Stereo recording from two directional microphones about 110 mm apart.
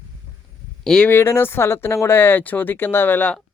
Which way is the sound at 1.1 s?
20° left (ahead or behind).